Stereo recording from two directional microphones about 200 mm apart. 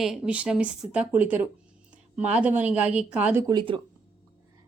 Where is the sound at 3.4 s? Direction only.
20° right (ahead or behind).